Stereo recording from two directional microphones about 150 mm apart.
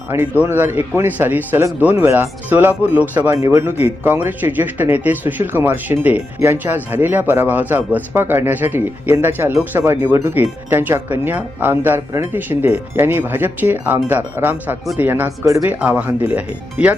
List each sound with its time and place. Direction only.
0.1 s speech: 15° right (ahead or behind)